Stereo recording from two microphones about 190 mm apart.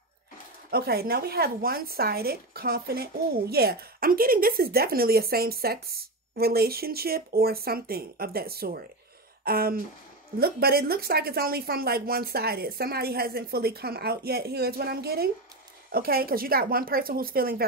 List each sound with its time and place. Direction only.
0.7 s speech: 55° right (ahead or behind)
9.4 s a sound: 50° right (ahead or behind)
10.4 s speech: 55° right (ahead or behind)